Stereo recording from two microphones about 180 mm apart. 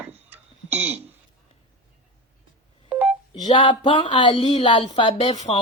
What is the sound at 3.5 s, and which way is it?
Speech, 25° left (ahead or behind).